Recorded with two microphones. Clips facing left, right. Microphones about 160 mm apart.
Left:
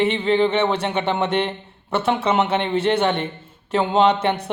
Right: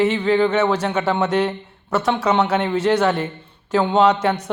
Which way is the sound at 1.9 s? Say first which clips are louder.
Right 1 dB; 30° left (ahead or behind).